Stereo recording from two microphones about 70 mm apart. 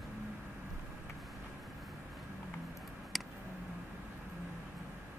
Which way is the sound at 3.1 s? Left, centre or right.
Centre.